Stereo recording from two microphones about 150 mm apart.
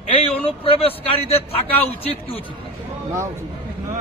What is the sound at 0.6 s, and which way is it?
Speech, 40° left (ahead or behind).